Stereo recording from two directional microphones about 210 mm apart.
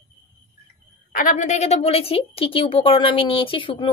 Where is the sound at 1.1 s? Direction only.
35° left (ahead or behind).